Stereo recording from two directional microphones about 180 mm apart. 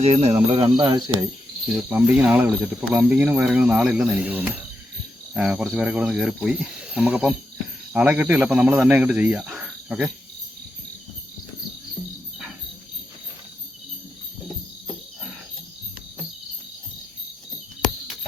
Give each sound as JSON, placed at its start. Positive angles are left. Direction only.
{"t": 0.0, "sound": "speech", "side_deg": -35}
{"t": 1.9, "sound": "speech", "side_deg": -10}